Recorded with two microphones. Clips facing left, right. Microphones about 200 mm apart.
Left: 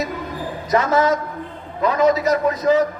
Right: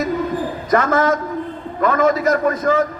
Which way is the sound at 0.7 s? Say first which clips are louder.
Right 1 dB; 55° right (ahead or behind).